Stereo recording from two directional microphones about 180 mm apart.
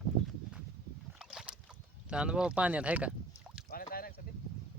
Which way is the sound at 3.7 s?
55° left (ahead or behind).